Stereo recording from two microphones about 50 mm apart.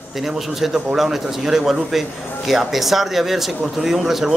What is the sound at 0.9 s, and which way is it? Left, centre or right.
Speech, centre.